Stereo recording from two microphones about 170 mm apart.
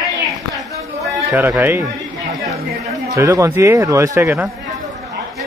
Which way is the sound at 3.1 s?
20° right (ahead or behind).